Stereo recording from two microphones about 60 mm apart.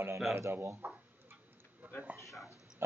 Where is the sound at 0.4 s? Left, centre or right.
Right.